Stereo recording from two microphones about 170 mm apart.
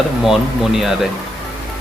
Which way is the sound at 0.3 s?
Centre (ahead or behind).